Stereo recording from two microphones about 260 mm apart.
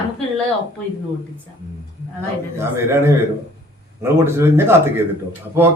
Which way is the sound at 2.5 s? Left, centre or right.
Centre.